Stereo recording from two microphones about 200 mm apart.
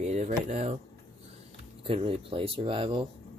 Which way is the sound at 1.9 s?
25° right (ahead or behind).